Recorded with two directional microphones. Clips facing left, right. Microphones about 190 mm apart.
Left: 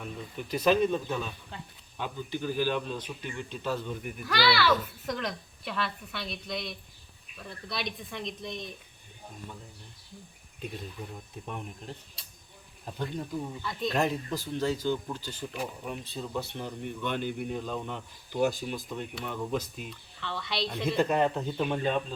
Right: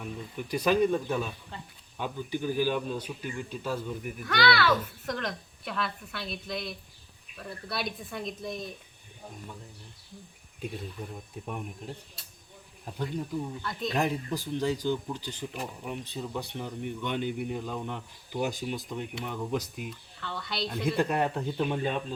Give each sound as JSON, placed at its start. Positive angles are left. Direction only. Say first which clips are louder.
{"t": 0.0, "sound": "speech", "louder": "right 1 dB", "side_deg": -10}
{"t": 11.4, "sound": "speech", "louder": "right 2 dB", "side_deg": -5}
{"t": 13.5, "sound": "speech", "louder": "left 1 dB", "side_deg": 0}
{"t": 14.0, "sound": "speech", "louder": "even", "side_deg": -10}
{"t": 19.9, "sound": "speech", "louder": "left 1 dB", "side_deg": 0}